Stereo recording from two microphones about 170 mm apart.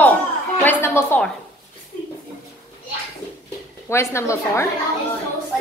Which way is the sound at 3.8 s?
15° left (ahead or behind).